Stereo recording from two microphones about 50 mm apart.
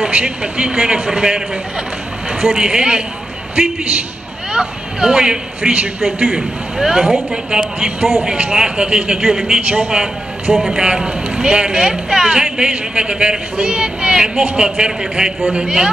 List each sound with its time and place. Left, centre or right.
0.0 s speech: centre
2.4 s speech: centre
4.5 s speech: centre
6.2 s speech: centre